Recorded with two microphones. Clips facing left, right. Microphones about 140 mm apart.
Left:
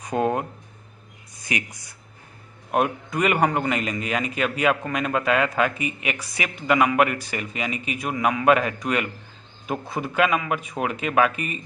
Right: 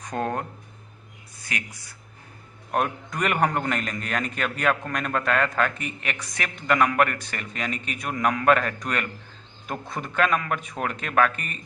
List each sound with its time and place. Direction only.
0.0 s speech: 10° left (ahead or behind)
2.7 s a man's voice: 5° left (ahead or behind)